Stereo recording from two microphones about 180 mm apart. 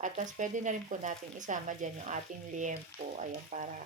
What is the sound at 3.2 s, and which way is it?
Speech, 40° right (ahead or behind).